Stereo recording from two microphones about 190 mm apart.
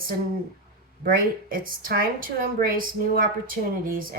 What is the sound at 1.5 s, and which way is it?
A woman's voice, 50° right (ahead or behind).